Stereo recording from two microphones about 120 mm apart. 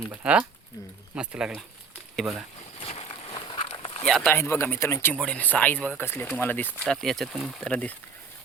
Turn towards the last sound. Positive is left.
turn(degrees=10)  # may be behind; listen again after turning